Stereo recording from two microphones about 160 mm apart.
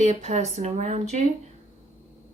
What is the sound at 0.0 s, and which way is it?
Speech, 50° right (ahead or behind).